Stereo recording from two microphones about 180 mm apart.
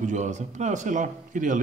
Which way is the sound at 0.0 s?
40° right (ahead or behind).